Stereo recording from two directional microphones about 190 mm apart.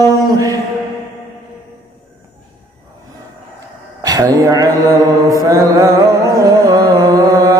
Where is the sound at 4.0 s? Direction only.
20° right (ahead or behind).